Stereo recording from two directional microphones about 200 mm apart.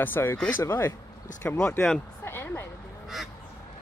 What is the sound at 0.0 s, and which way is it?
Speech, 10° left (ahead or behind).